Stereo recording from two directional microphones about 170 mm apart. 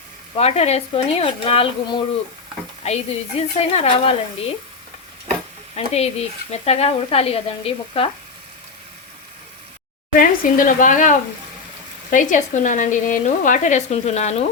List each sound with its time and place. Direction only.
0.3 s speech: 40° left (ahead or behind)
5.7 s speech: 40° left (ahead or behind)
10.1 s speech: 55° left (ahead or behind)